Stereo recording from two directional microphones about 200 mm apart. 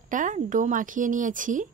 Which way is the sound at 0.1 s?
40° right (ahead or behind).